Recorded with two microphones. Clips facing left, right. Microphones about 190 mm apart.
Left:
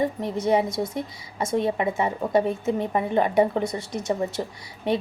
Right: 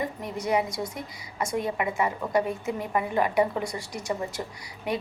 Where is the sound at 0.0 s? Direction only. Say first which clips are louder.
Left 6 dB; 25° left (ahead or behind).